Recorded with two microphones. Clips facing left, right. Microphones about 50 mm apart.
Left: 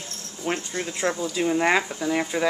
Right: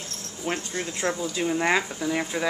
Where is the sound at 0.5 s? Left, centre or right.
Centre.